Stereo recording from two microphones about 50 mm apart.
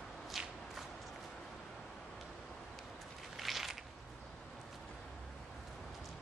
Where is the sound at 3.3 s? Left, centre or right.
Centre.